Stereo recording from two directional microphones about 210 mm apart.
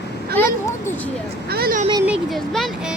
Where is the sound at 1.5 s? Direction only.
45° right (ahead or behind).